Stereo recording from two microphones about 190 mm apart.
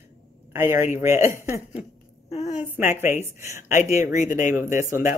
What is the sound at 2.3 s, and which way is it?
Speech, 35° left (ahead or behind).